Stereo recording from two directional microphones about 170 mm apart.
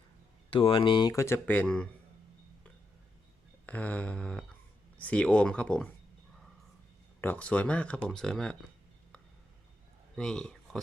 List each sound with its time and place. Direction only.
0.5 s speech: 30° left (ahead or behind); by 1.9 s 5° left (ahead or behind)
3.7 s speech: 10° left (ahead or behind)
7.2 s speech: 10° left (ahead or behind)
10.2 s speech: 5° left (ahead or behind)